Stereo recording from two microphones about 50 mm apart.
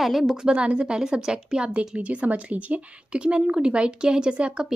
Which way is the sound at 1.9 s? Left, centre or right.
Right.